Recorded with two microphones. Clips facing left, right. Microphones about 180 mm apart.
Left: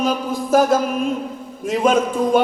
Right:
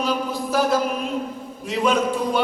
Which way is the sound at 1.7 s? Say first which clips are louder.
Left 3 dB; 45° left (ahead or behind).